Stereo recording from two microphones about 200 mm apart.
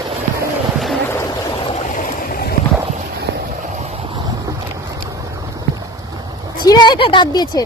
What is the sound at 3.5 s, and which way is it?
Boat, 35° right (ahead or behind).